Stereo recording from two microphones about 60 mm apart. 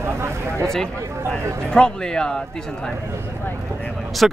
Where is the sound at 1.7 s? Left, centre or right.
Centre.